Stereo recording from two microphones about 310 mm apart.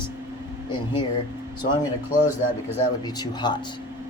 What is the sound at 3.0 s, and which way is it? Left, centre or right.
Speech, centre.